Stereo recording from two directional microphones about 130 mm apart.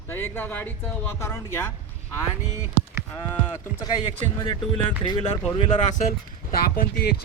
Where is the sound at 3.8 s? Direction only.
35° left (ahead or behind).